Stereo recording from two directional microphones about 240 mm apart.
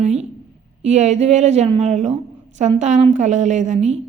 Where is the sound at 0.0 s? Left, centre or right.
Right.